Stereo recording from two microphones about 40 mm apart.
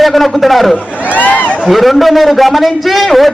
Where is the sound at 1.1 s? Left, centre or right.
Left.